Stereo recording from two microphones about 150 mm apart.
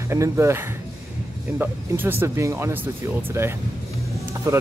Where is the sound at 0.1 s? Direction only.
20° right (ahead or behind).